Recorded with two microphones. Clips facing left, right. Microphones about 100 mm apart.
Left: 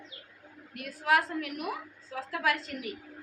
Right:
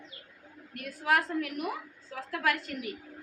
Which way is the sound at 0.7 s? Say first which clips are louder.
Left 1 dB; 5° left (ahead or behind).